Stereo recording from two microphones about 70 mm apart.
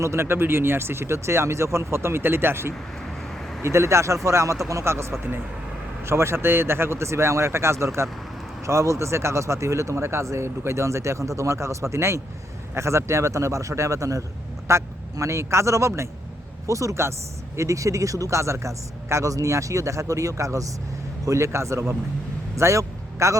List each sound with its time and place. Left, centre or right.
0.0 s speech: right
6.1 s a man's voice: right